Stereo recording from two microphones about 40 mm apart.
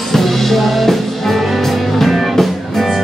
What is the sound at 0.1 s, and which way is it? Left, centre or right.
Music, centre.